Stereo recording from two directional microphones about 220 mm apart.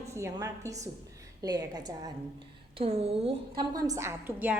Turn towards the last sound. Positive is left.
turn(degrees=-10)  # may be behind; listen again after turning